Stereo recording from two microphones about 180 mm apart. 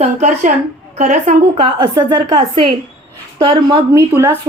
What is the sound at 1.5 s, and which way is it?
A woman's voice, 30° right (ahead or behind).